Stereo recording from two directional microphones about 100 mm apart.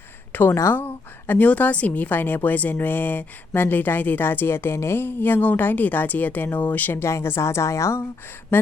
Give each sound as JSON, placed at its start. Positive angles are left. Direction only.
{"t": 0.5, "sound": "a woman's voice", "side_deg": 25}